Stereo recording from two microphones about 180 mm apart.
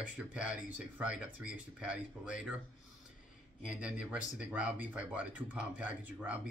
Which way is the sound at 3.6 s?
5° right (ahead or behind).